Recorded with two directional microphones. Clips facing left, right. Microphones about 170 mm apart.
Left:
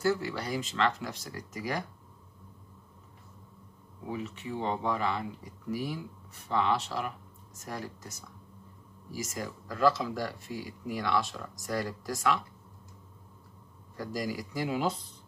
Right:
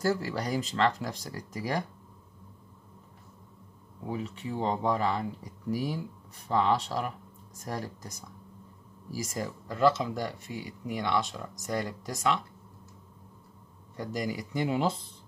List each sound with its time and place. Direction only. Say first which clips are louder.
0.0 s speech: right 1 dB; 40° right (ahead or behind)
4.1 s speech: right 2 dB; 35° right (ahead or behind)
13.9 s speech: right 1 dB; 20° right (ahead or behind)